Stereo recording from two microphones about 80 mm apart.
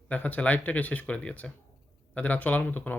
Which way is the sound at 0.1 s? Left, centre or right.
Centre.